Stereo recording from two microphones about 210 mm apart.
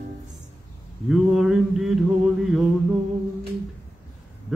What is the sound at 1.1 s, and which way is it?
Mantra, centre (ahead or behind).